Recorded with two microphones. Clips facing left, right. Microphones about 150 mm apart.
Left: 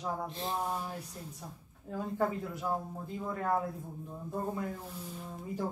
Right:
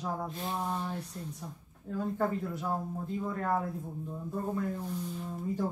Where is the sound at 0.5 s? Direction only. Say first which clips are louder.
Right 2 dB; 5° left (ahead or behind).